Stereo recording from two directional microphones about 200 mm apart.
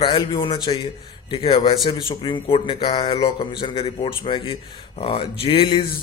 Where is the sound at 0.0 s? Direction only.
25° left (ahead or behind).